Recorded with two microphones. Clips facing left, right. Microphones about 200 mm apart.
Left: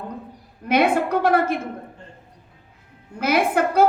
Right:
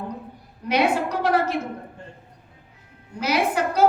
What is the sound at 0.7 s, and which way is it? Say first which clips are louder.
Speech: left 3 dB; 55° left (ahead or behind).